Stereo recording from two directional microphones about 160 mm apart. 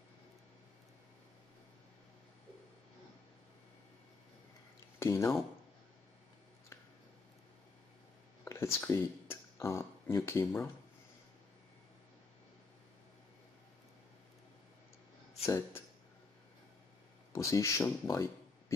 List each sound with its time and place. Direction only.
4.9 s speech: 15° left (ahead or behind)
8.5 s speech: 15° left (ahead or behind)
15.4 s speech: 15° left (ahead or behind)
17.3 s speech: 20° left (ahead or behind)